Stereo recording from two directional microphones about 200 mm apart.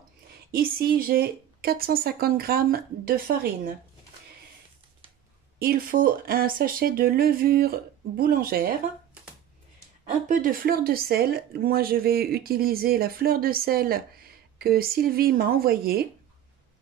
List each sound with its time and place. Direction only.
0.5 s speech: 50° right (ahead or behind)
5.6 s speech: 45° right (ahead or behind)
10.2 s speech: 45° right (ahead or behind)